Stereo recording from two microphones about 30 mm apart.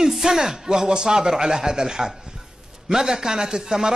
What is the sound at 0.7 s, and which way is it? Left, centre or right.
Speech, right.